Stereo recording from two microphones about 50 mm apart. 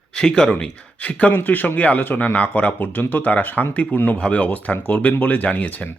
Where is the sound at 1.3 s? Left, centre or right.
Left.